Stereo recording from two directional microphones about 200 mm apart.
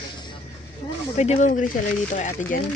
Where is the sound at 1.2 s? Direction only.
35° left (ahead or behind).